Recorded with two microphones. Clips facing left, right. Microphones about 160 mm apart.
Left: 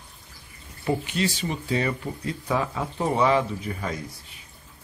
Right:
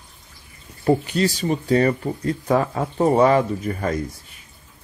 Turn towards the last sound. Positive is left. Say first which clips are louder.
# right 7 dB
turn(degrees=-50)  # may be behind; listen again after turning